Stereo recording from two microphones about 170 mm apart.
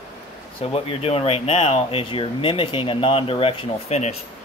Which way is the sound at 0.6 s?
35° left (ahead or behind).